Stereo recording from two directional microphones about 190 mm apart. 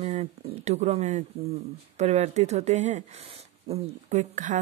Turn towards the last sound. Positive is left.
turn(degrees=-40)  # may be behind; listen again after turning